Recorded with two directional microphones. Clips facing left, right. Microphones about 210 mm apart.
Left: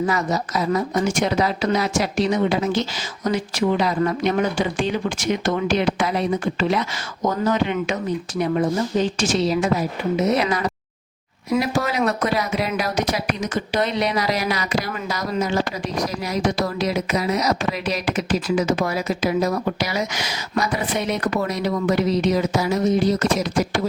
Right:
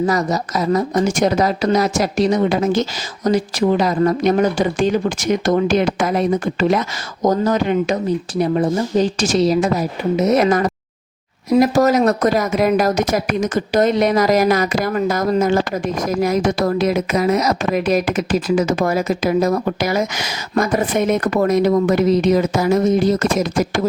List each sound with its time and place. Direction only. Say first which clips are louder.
0.0 s speech: right 4 dB; 40° right (ahead or behind)